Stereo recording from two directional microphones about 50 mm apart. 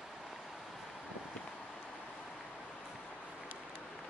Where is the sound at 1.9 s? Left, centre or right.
Centre.